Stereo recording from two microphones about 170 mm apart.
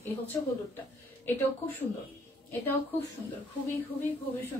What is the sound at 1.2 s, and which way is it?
Speech, 10° left (ahead or behind).